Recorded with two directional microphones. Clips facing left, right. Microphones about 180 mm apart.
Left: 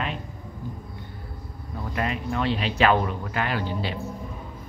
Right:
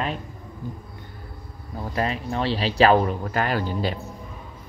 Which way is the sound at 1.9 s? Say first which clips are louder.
Right 2 dB; 30° right (ahead or behind).